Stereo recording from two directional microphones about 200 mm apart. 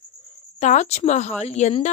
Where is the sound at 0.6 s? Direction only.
35° left (ahead or behind).